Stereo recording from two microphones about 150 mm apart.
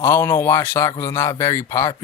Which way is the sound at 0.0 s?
15° left (ahead or behind).